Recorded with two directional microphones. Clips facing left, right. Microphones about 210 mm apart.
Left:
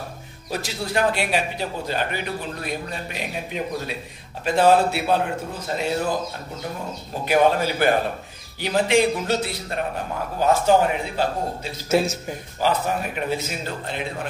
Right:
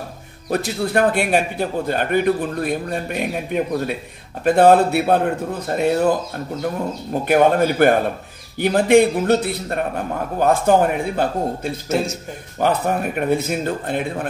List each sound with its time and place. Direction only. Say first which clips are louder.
0.5 s a man's voice: right 7 dB; 55° right (ahead or behind)